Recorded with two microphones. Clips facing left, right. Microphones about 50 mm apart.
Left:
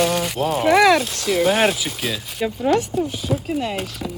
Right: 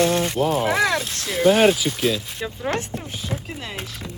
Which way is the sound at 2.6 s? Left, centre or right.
Right.